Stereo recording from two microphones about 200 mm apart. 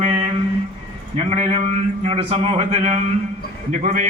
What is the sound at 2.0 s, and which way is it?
A man's voice, 30° right (ahead or behind).